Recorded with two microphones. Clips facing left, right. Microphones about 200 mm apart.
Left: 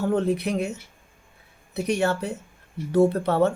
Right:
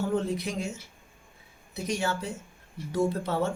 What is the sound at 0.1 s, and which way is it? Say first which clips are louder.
Speech: left 6 dB; 65° left (ahead or behind).